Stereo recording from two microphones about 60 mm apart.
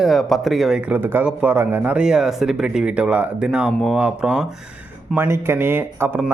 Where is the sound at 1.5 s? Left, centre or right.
Right.